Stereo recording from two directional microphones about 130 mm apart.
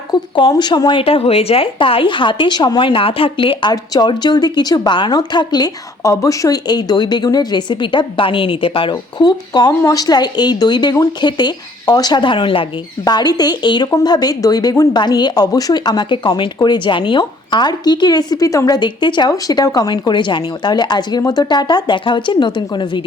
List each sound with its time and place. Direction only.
0.1 s speech: 35° left (ahead or behind)